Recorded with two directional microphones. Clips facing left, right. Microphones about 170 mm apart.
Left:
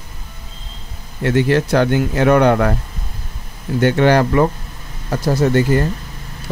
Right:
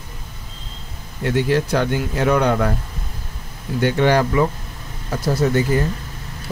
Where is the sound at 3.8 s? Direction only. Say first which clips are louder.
Left 3 dB; 60° left (ahead or behind).